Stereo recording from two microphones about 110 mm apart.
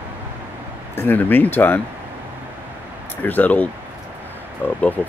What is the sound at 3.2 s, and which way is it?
Speech, 15° left (ahead or behind).